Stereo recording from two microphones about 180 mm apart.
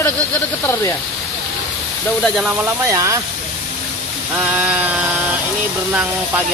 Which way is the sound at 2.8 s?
15° right (ahead or behind).